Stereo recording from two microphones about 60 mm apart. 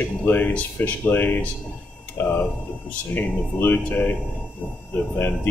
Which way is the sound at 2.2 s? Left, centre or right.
Left.